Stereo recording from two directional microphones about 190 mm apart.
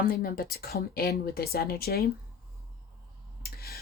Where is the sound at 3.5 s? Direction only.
55° left (ahead or behind).